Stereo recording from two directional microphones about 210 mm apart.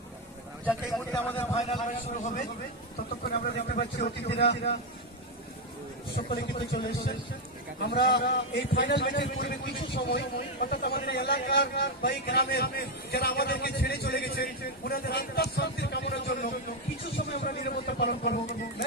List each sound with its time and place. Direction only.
0.6 s speech: 5° left (ahead or behind)
3.2 s a man's voice: 45° left (ahead or behind)
6.3 s a man's voice: 50° left (ahead or behind)